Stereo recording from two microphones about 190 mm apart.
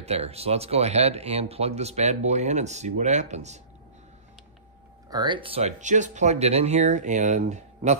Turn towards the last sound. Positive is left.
turn(degrees=-35)  # may be behind; listen again after turning